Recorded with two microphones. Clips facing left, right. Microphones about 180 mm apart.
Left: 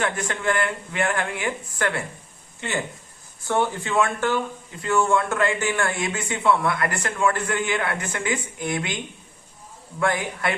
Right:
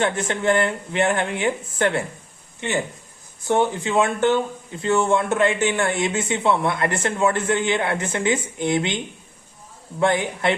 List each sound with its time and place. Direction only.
0.0 s speech: 25° right (ahead or behind)
10.0 s speech: 25° right (ahead or behind)